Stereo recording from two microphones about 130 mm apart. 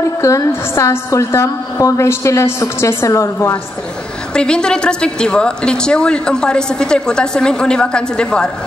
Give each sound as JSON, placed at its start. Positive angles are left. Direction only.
{"t": 0.2, "sound": "a woman's voice", "side_deg": 20}
{"t": 4.3, "sound": "a woman's voice", "side_deg": 5}